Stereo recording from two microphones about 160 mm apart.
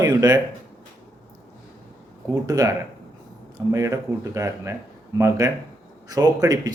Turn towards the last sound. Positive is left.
turn(degrees=-25)  # may be behind; listen again after turning